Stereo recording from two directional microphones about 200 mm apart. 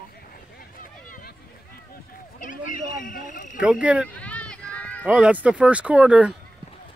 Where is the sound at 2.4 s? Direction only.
40° left (ahead or behind).